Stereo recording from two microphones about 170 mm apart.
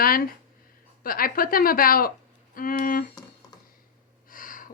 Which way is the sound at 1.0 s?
55° left (ahead or behind).